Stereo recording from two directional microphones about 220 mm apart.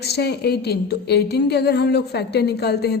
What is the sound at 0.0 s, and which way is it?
A woman's voice, 45° left (ahead or behind).